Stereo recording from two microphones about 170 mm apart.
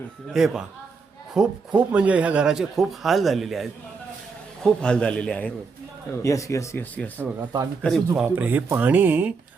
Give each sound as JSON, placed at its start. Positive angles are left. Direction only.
{"t": 0.3, "sound": "speech", "side_deg": 0}
{"t": 6.2, "sound": "speech", "side_deg": 20}
{"t": 7.3, "sound": "speech", "side_deg": -15}